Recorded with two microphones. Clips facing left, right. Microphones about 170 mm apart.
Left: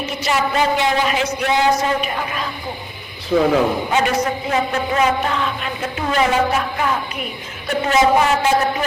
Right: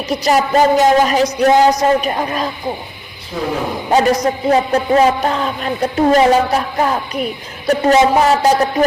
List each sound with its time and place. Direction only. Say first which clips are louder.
0.0 s a man's voice: right 5 dB; 40° right (ahead or behind)
3.3 s speech: left 7 dB; 90° left
3.9 s a man's voice: right 10 dB; 40° right (ahead or behind)